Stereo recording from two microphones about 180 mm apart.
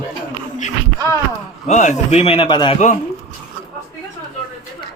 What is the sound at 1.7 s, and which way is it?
Speech, 40° left (ahead or behind).